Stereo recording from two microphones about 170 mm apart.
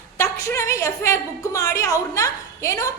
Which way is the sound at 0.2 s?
15° left (ahead or behind).